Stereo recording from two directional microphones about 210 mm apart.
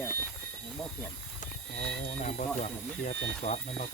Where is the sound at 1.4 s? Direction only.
35° left (ahead or behind).